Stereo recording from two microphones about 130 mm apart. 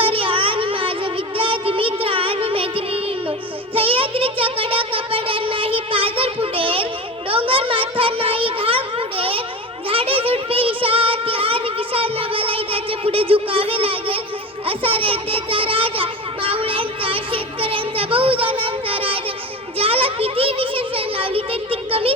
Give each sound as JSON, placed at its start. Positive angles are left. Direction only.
{"t": 0.0, "sound": "child singing", "side_deg": -45}
{"t": 7.3, "sound": "a sound", "side_deg": -45}
{"t": 9.9, "sound": "child singing", "side_deg": -45}
{"t": 19.8, "sound": "children playing", "side_deg": -45}